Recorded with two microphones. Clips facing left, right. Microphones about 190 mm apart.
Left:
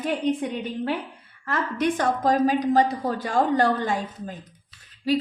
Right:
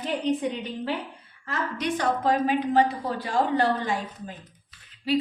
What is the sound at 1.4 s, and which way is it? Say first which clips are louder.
A woman's voice: left 5 dB; 55° left (ahead or behind).